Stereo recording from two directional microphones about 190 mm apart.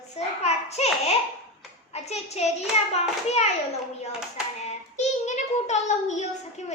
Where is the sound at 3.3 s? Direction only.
35° left (ahead or behind).